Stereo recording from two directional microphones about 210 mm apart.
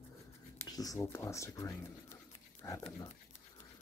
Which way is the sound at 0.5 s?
15° left (ahead or behind).